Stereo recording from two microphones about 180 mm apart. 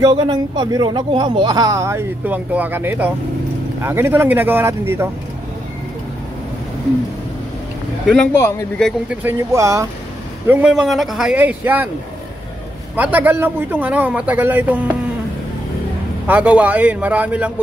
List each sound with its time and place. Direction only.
0.0 s speech: 25° right (ahead or behind)
8.1 s a man's voice: 5° left (ahead or behind)
9.1 s a man's voice: 10° right (ahead or behind)
12.9 s speech: 10° right (ahead or behind)
16.3 s speech: 10° right (ahead or behind)